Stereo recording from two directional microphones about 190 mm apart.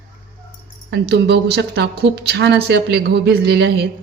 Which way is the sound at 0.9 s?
60° right (ahead or behind).